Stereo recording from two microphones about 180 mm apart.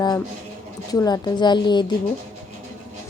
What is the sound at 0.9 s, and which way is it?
Speech, 20° left (ahead or behind).